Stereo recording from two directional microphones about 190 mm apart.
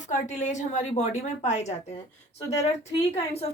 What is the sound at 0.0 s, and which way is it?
Speech, 40° left (ahead or behind).